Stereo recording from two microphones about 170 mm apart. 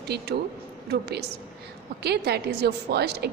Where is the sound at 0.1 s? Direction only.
75° right (ahead or behind).